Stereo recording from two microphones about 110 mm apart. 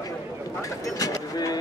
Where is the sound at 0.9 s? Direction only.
30° left (ahead or behind).